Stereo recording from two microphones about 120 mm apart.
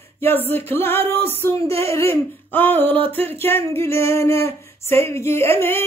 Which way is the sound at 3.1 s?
20° left (ahead or behind).